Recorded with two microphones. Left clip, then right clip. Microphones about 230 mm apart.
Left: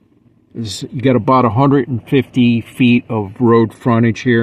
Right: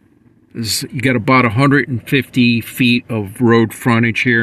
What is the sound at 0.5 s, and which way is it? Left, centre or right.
Speech, centre.